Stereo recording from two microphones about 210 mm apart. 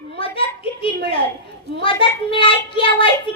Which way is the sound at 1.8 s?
25° left (ahead or behind).